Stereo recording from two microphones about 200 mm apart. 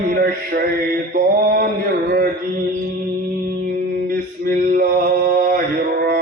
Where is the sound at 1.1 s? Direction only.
45° right (ahead or behind).